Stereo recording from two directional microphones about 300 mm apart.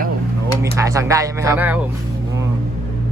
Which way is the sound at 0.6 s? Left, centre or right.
Centre.